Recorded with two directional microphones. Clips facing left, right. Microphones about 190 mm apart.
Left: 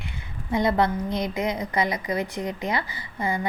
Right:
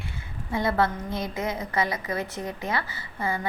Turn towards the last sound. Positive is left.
turn(degrees=15)  # may be behind; listen again after turning